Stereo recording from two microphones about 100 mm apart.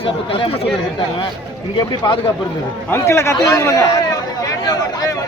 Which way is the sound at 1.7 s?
55° left (ahead or behind).